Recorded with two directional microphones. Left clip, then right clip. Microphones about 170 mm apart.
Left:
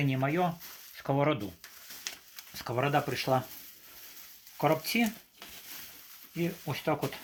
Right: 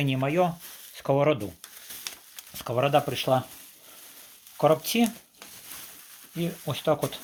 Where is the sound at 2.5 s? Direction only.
40° right (ahead or behind).